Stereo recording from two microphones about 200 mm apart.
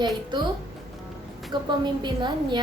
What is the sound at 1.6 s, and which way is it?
Speech, 20° right (ahead or behind).